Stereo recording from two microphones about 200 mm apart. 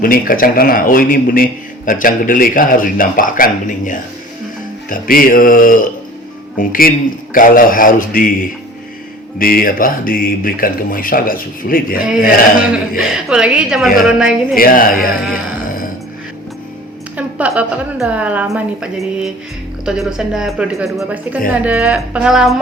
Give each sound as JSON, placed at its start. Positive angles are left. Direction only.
{"t": 0.0, "sound": "speech", "side_deg": 45}
{"t": 9.4, "sound": "speech", "side_deg": 45}
{"t": 13.0, "sound": "speech", "side_deg": 0}
{"t": 14.5, "sound": "speech", "side_deg": 45}
{"t": 17.2, "sound": "a woman's voice", "side_deg": -5}